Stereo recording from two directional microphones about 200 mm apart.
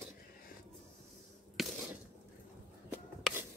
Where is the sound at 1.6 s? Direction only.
Centre (ahead or behind).